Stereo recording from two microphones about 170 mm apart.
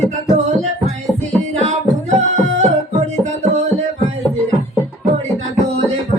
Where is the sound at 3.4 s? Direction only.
40° right (ahead or behind).